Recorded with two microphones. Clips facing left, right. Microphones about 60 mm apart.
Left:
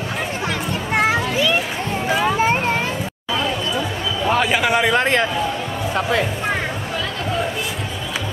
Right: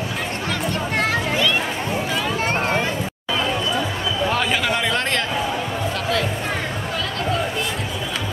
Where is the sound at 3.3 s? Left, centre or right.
Centre.